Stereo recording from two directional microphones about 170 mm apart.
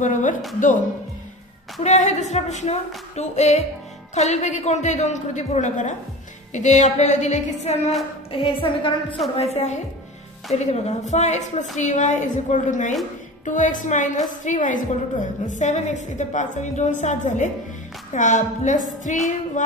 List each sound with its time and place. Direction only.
0.0 s a woman's voice: 50° left (ahead or behind)
1.8 s a woman's voice: 45° left (ahead or behind)
8.3 s a woman's voice: 30° left (ahead or behind)
9.4 s a woman's voice: 40° left (ahead or behind)